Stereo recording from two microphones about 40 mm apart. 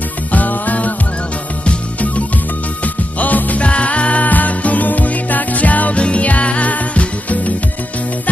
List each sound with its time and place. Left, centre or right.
0.3 s music: left
3.6 s music: left
6.0 s music: left